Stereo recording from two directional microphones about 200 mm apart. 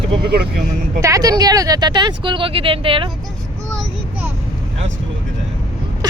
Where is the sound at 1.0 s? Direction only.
15° right (ahead or behind).